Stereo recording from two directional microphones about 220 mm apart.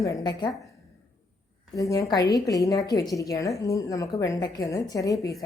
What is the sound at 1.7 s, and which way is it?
A woman's voice, 15° left (ahead or behind).